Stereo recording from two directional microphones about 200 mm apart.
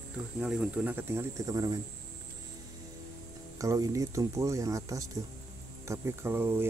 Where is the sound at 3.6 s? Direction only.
15° right (ahead or behind).